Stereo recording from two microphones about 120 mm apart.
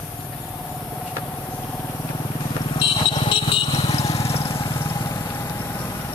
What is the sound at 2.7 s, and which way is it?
Vehicle, 40° left (ahead or behind).